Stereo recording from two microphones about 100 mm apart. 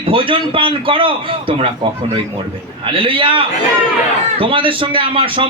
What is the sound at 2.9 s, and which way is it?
A man's voice, 60° right (ahead or behind).